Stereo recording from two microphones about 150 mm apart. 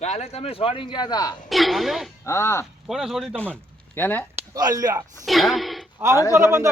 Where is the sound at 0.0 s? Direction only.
45° left (ahead or behind); by 1.4 s 30° left (ahead or behind).